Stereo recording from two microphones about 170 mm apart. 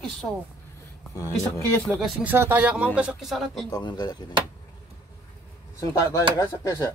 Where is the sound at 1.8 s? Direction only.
Centre (ahead or behind).